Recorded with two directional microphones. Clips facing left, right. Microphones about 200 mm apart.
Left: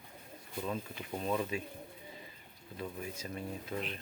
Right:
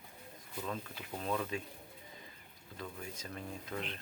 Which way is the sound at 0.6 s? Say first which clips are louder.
Left 3 dB; 10° left (ahead or behind).